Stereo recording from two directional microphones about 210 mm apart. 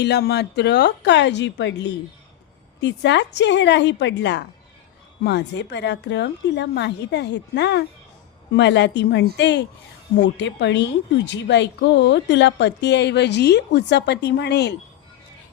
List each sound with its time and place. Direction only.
0.0 s a woman's voice: 50° left (ahead or behind)
2.8 s a woman's voice: 55° left (ahead or behind)